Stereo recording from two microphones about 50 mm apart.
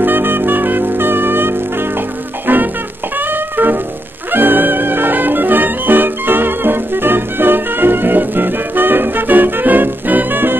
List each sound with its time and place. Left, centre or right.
0.0 s music: right